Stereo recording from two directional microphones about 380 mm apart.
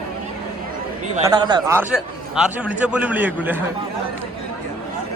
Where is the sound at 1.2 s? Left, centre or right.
Centre.